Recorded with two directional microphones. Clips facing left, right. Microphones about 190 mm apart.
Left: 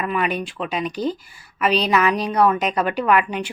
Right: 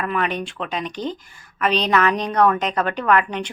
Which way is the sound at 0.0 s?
10° left (ahead or behind).